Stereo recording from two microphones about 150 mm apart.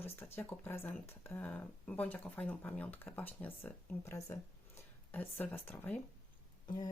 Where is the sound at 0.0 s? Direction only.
15° left (ahead or behind).